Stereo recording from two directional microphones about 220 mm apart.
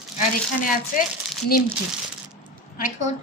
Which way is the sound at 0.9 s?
35° left (ahead or behind).